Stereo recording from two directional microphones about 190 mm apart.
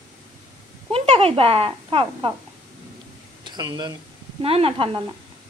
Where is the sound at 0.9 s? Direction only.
30° right (ahead or behind).